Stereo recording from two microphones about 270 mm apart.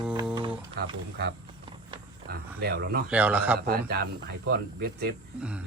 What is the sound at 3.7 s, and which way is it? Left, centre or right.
Speech, right.